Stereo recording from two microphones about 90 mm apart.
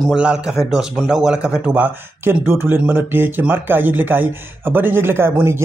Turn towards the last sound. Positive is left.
turn(degrees=-30)  # may be behind; listen again after turning